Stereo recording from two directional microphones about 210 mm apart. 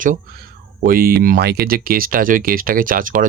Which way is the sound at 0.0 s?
40° right (ahead or behind).